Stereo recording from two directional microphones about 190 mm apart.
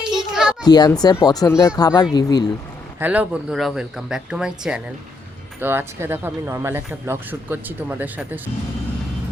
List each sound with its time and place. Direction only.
0.1 s children playing: 5° right (ahead or behind)
0.6 s speech: 20° left (ahead or behind)
3.0 s speech: 5° right (ahead or behind)